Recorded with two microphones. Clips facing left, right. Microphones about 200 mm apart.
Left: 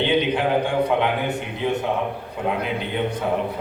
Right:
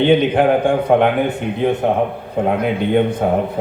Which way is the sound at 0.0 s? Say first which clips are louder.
Right 7 dB; 50° right (ahead or behind).